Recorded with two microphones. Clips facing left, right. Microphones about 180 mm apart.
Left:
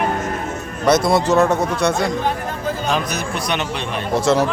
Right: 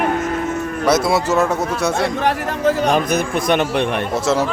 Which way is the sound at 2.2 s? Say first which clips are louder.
Right 5 dB; 80° right.